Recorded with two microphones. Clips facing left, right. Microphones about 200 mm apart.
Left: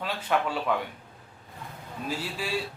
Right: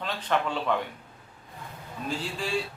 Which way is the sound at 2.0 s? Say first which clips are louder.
Right 1 dB; 5° left (ahead or behind).